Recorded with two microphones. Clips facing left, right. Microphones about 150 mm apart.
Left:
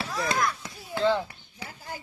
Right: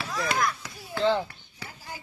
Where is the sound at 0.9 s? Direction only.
15° left (ahead or behind).